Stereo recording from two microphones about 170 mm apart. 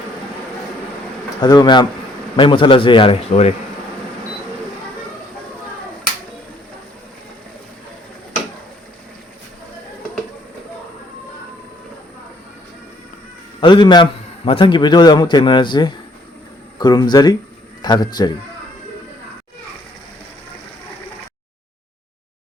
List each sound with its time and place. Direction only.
1.4 s a man's voice: 25° left (ahead or behind)
13.6 s a man's voice: 30° left (ahead or behind)